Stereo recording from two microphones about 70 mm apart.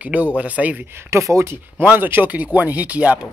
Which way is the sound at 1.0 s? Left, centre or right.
Right.